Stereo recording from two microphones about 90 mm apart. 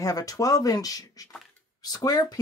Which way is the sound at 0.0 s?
40° left (ahead or behind).